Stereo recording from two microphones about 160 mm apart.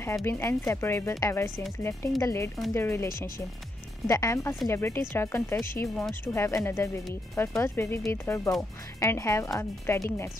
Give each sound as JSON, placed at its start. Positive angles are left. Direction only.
{"t": 0.0, "sound": "speech", "side_deg": 15}
{"t": 4.1, "sound": "speech", "side_deg": 20}
{"t": 5.9, "sound": "speech", "side_deg": 5}
{"t": 6.3, "sound": "speech", "side_deg": 15}